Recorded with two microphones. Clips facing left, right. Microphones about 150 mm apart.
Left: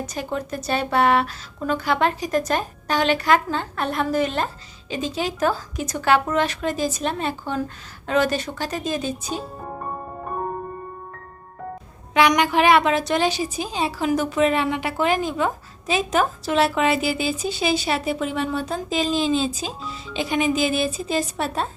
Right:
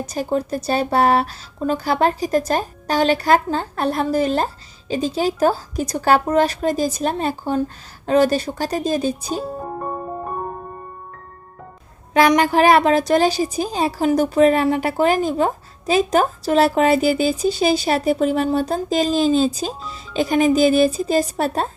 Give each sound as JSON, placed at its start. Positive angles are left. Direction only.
{"t": 0.1, "sound": "a woman's voice", "side_deg": -35}
{"t": 12.4, "sound": "a woman's voice", "side_deg": -40}